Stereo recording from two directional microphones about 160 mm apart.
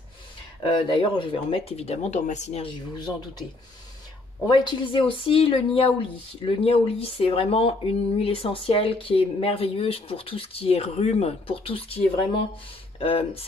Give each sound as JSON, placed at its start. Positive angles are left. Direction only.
{"t": 0.6, "sound": "speech", "side_deg": 30}
{"t": 4.5, "sound": "speech", "side_deg": 30}
{"t": 13.0, "sound": "speech", "side_deg": 35}